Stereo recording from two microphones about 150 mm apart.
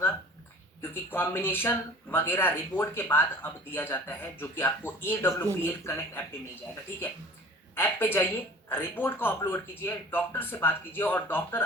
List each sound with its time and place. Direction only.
0.8 s speech: 15° left (ahead or behind)
7.8 s speech: 15° left (ahead or behind)